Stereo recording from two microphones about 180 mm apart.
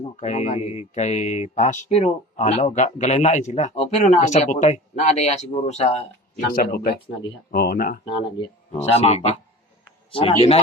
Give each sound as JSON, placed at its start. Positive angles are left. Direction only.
{"t": 0.2, "sound": "speech", "side_deg": 40}
{"t": 6.5, "sound": "speech", "side_deg": 55}
{"t": 8.1, "sound": "speech", "side_deg": 25}